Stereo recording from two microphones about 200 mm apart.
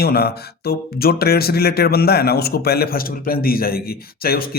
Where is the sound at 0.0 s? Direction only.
50° left (ahead or behind).